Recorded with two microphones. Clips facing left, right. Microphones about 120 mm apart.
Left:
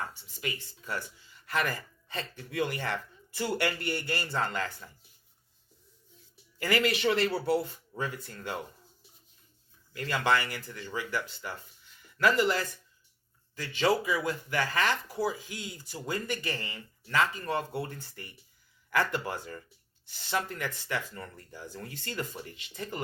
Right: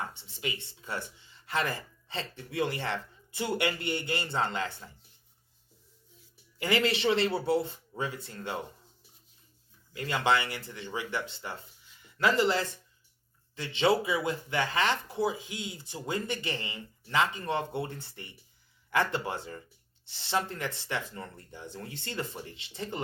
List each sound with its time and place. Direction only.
0.0 s speech: 25° right (ahead or behind)
6.6 s speech: 20° right (ahead or behind)
9.9 s speech: 25° right (ahead or behind)